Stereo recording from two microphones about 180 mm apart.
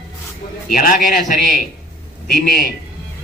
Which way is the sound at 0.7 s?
50° left (ahead or behind).